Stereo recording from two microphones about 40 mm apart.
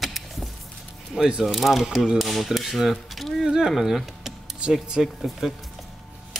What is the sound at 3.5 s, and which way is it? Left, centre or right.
Speech, centre.